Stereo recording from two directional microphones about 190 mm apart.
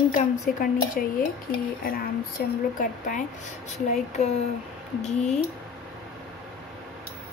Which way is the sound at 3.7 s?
35° left (ahead or behind).